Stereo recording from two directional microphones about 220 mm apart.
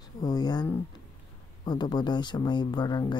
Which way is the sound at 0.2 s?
15° left (ahead or behind).